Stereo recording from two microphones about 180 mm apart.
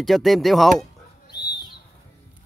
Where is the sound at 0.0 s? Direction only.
Centre (ahead or behind).